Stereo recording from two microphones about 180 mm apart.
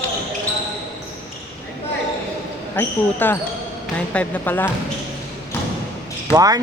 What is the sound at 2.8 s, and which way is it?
Speech, 10° left (ahead or behind).